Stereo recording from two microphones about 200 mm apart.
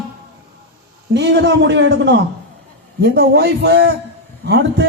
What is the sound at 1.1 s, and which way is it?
A man's voice, 55° right (ahead or behind).